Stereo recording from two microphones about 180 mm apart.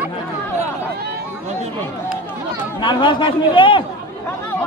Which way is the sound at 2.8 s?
25° left (ahead or behind).